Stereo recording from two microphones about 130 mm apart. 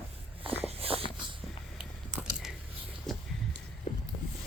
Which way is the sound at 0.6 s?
45° right (ahead or behind).